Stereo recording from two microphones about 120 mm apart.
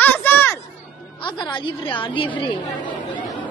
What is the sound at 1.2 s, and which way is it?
A woman's voice, 45° left (ahead or behind).